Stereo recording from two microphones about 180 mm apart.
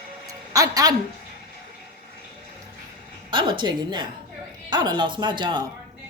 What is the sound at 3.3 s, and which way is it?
A woman's voice, 25° right (ahead or behind).